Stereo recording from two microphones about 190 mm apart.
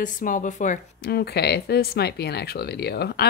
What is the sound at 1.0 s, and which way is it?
A woman's voice, 60° left (ahead or behind).